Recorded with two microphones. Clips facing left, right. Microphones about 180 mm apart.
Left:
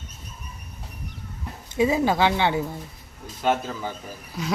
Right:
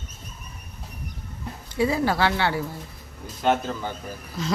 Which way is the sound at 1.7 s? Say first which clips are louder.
Left 2 dB; 20° left (ahead or behind).